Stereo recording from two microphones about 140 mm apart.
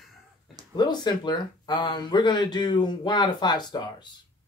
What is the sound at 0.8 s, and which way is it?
Speech, 30° left (ahead or behind).